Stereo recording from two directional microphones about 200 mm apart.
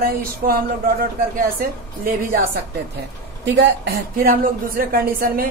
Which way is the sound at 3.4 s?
60° right (ahead or behind).